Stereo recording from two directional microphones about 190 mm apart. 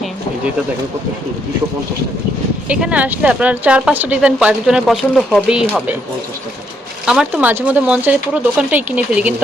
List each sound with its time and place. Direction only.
2.6 s a woman's voice: 5° right (ahead or behind)
7.0 s a woman's voice: 5° right (ahead or behind)